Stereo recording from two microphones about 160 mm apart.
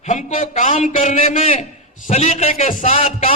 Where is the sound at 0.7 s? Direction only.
40° left (ahead or behind).